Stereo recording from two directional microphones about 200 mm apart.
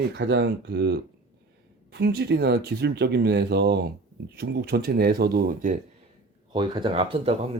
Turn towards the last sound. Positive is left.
turn(degrees=-30)  # may be behind; listen again after turning